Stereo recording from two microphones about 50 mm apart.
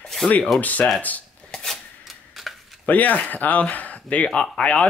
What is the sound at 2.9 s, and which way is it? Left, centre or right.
Speech, left.